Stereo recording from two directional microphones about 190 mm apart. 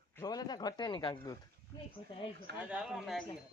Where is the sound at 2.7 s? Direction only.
5° right (ahead or behind).